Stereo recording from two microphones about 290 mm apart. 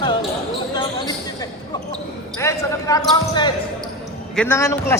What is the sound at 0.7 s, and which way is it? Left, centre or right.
Basketball bounce, centre.